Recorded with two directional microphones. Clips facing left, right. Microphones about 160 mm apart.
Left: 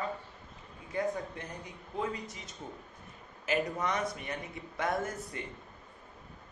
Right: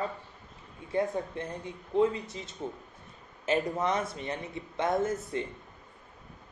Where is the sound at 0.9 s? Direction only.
25° right (ahead or behind).